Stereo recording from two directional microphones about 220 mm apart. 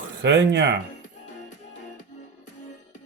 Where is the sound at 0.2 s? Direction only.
50° right (ahead or behind).